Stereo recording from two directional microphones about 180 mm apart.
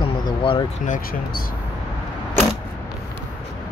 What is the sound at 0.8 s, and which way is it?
Speech, 45° left (ahead or behind).